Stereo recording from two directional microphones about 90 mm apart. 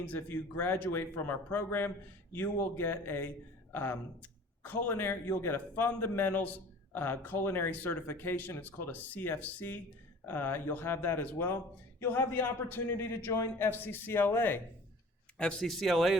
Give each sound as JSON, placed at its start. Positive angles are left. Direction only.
{"t": 0.0, "sound": "a man's voice", "side_deg": 20}
{"t": 15.4, "sound": "speech", "side_deg": 10}